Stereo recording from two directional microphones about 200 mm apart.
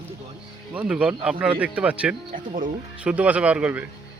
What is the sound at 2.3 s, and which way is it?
Speech, 40° right (ahead or behind).